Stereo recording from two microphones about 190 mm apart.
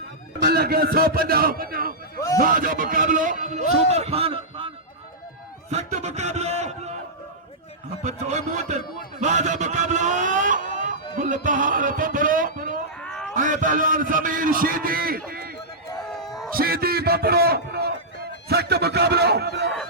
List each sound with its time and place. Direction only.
0.4 s a man's voice: 55° right (ahead or behind); by 4.7 s 30° right (ahead or behind)
5.7 s speech: 35° right (ahead or behind)
8.0 s a man's voice: 40° right (ahead or behind)
12.5 s a sound: 45° right (ahead or behind)
13.0 s cat: 5° left (ahead or behind)
13.3 s a man's voice: 45° right (ahead or behind)
15.3 s run: 50° right (ahead or behind)
16.0 s a sound: centre (ahead or behind)
16.6 s a man's voice: 50° right (ahead or behind)